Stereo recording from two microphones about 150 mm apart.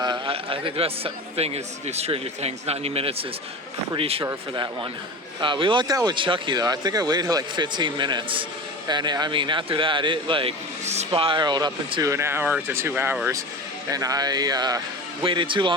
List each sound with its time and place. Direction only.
0.0 s a man's voice: 35° right (ahead or behind)
4.2 s a man's voice: 25° right (ahead or behind)